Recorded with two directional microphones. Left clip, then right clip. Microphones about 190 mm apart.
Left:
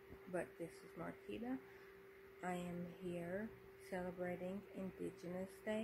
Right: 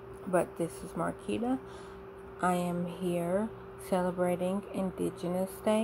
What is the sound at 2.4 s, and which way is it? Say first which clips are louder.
Speech: right 17 dB; 15° right (ahead or behind).